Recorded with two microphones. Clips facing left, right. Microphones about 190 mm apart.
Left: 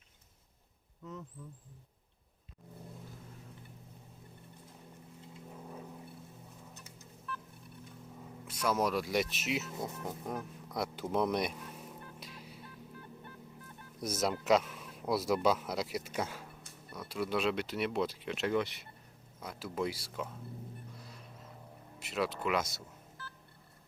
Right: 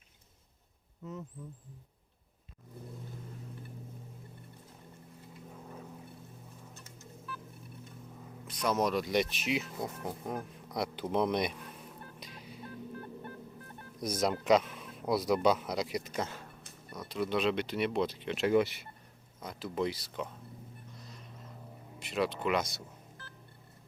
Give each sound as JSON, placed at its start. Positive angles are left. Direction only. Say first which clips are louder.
{"t": 8.4, "sound": "speech", "louder": "right 1 dB", "side_deg": 5}
{"t": 9.8, "sound": "speech", "louder": "right 2 dB", "side_deg": -10}
{"t": 11.1, "sound": "speech", "louder": "right 2 dB", "side_deg": 5}
{"t": 12.2, "sound": "music", "louder": "right 1 dB", "side_deg": 5}
{"t": 12.5, "sound": "music", "louder": "right 7 dB", "side_deg": -50}
{"t": 14.0, "sound": "speech", "louder": "right 2 dB", "side_deg": 5}
{"t": 19.4, "sound": "speech", "louder": "right 2 dB", "side_deg": 5}
{"t": 21.9, "sound": "speech", "louder": "right 2 dB", "side_deg": 5}